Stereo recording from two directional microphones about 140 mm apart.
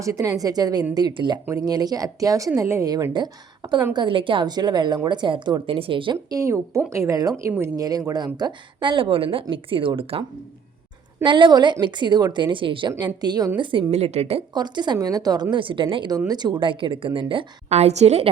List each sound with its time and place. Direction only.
0.0 s a woman's voice: 25° right (ahead or behind)
6.4 s a woman's voice: 20° right (ahead or behind); by 13.9 s 35° right (ahead or behind)
13.9 s a woman's voice: 50° right (ahead or behind)
14.5 s a woman's voice: 30° right (ahead or behind); by 18.3 s 50° right (ahead or behind)